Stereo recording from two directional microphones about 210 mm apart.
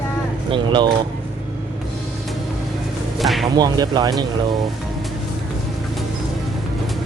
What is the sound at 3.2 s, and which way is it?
Music, centre (ahead or behind).